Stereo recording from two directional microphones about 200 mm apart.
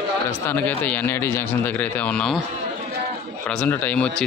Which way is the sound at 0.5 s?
10° left (ahead or behind).